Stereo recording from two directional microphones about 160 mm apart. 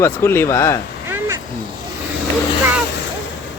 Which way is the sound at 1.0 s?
15° right (ahead or behind).